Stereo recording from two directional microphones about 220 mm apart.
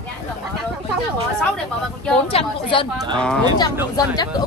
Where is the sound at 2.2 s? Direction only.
25° left (ahead or behind).